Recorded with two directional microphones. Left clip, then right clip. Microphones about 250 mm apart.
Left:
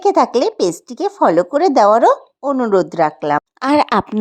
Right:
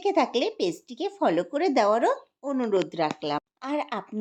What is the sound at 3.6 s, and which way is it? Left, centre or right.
Speech, left.